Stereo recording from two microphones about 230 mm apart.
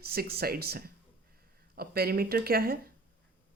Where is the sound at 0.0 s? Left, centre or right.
Right.